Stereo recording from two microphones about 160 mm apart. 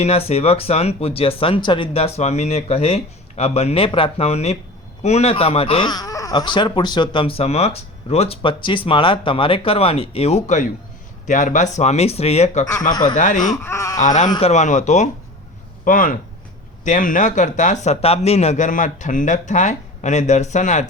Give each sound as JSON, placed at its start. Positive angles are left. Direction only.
{"t": 0.0, "sound": "speech", "side_deg": 40}
{"t": 12.9, "sound": "speech", "side_deg": 25}
{"t": 13.1, "sound": "speech", "side_deg": 50}
{"t": 13.4, "sound": "speech", "side_deg": 20}
{"t": 14.0, "sound": "speech", "side_deg": 50}
{"t": 14.3, "sound": "speech", "side_deg": 30}
{"t": 14.5, "sound": "speech", "side_deg": 45}